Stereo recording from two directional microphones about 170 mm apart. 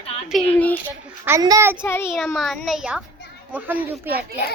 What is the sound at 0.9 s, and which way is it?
Speech, 10° right (ahead or behind).